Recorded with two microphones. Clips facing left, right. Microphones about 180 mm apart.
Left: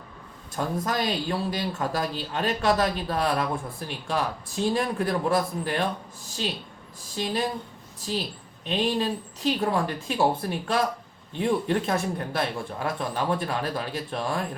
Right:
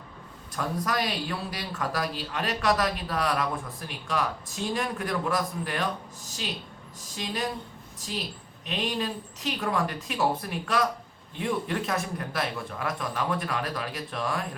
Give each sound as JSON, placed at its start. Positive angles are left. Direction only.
{"t": 0.5, "sound": "a woman's voice", "side_deg": 30}